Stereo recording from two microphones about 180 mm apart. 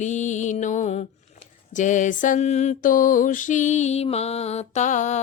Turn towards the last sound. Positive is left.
turn(degrees=40)  # may be behind; listen again after turning